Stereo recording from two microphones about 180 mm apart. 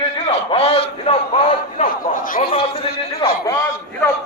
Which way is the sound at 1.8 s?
50° left (ahead or behind).